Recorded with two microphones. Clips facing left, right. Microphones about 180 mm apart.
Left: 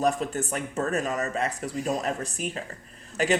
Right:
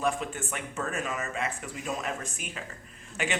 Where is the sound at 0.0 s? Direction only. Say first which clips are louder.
Left 5 dB; 40° left (ahead or behind).